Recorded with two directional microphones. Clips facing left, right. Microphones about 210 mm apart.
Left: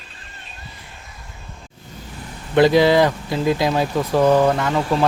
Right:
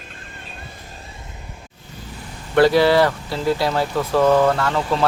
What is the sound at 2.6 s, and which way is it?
Speech, 15° left (ahead or behind).